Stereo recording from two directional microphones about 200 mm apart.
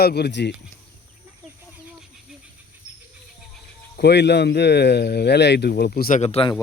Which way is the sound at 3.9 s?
55° left (ahead or behind).